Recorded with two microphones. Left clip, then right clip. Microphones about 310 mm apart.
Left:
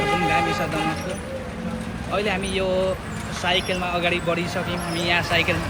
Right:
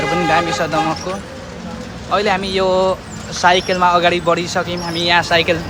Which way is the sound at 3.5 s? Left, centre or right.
Right.